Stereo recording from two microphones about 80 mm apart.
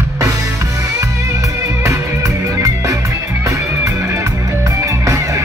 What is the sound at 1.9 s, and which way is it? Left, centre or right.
Music, right.